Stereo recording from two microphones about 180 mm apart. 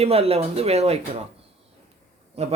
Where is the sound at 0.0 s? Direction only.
35° right (ahead or behind).